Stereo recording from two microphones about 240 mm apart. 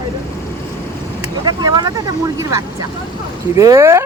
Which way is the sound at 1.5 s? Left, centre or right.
Centre.